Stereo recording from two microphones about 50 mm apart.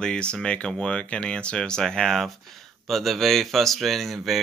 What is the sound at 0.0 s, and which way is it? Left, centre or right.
Speech, centre.